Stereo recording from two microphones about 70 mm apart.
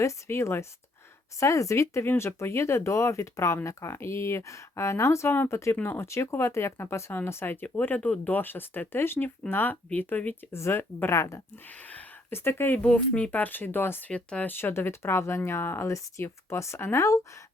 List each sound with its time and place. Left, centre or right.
0.0 s speech: left
10.5 s speech: left
12.3 s speech: left
12.8 s speech: centre; by 14.0 s left
14.1 s speech: centre
14.4 s speech: left